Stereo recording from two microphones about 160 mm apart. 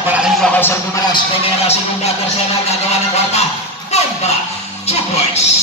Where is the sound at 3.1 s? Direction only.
45° left (ahead or behind).